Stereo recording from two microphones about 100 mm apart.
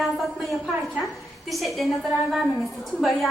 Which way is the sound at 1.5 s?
Centre (ahead or behind).